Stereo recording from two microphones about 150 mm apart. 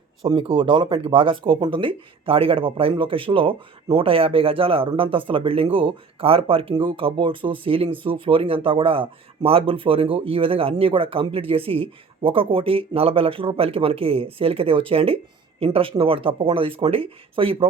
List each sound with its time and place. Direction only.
0.2 s speech: 35° right (ahead or behind)